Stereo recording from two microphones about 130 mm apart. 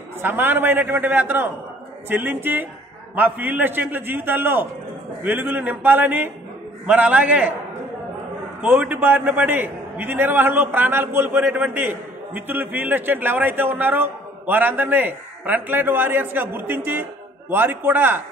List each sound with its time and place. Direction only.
0.2 s a man's voice: 15° right (ahead or behind)
8.6 s a man's voice: 10° right (ahead or behind)